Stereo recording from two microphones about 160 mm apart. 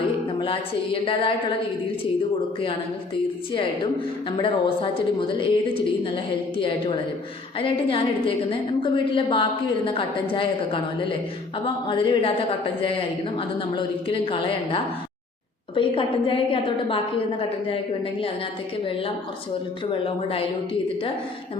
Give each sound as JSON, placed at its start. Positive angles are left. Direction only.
{"t": 1.0, "sound": "a woman's voice", "side_deg": 35}
{"t": 4.4, "sound": "a woman's voice", "side_deg": 30}
{"t": 6.6, "sound": "a woman's voice", "side_deg": 30}